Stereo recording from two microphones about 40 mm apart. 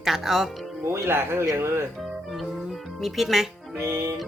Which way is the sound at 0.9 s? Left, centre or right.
Right.